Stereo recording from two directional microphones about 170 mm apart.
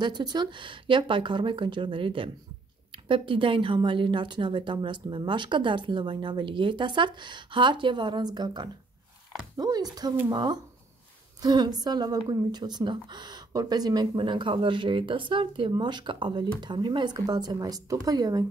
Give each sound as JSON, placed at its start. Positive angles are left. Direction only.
{"t": 0.0, "sound": "speech", "side_deg": -25}